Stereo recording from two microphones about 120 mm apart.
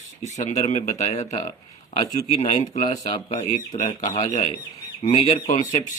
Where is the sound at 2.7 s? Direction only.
75° left (ahead or behind).